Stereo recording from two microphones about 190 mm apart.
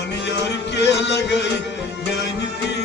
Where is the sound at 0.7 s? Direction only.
65° left (ahead or behind).